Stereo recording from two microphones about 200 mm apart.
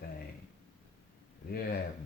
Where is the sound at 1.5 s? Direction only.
50° left (ahead or behind).